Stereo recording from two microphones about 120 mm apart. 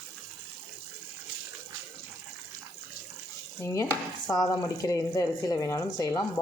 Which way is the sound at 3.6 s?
25° left (ahead or behind).